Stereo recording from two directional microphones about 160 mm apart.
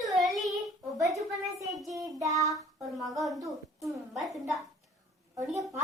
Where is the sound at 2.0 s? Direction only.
20° right (ahead or behind).